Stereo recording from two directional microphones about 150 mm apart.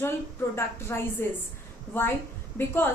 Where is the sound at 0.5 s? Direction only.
15° left (ahead or behind).